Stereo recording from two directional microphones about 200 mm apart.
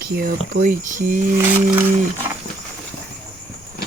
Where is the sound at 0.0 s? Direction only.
45° right (ahead or behind).